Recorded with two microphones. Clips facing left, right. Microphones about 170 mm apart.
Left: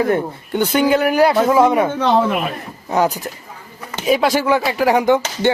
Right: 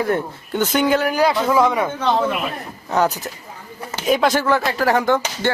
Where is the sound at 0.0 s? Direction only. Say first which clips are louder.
Left 3 dB; 15° left (ahead or behind).